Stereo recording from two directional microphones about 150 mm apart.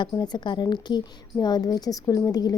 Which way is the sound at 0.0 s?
30° left (ahead or behind).